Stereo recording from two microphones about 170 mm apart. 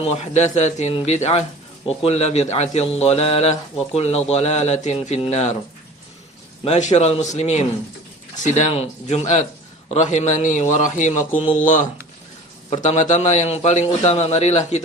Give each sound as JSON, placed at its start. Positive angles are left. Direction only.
{"t": 0.0, "sound": "a man's voice", "side_deg": 35}
{"t": 6.7, "sound": "a man's voice", "side_deg": 40}